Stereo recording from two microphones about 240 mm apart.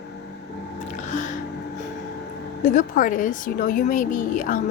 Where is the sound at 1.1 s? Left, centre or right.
Left.